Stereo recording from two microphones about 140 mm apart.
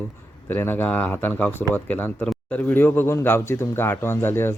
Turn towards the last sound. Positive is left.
turn(degrees=15)  # may be behind; listen again after turning